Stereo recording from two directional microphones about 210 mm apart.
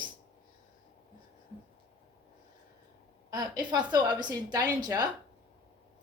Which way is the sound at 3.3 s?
20° right (ahead or behind).